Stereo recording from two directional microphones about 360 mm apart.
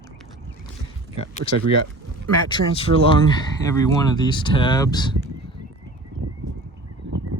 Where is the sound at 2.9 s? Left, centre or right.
Centre.